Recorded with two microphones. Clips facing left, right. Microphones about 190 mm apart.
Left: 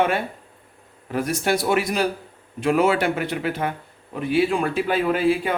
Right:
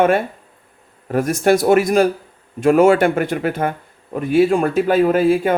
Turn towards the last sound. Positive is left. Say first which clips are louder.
# right 6 dB
turn(degrees=-45)  # may be behind; listen again after turning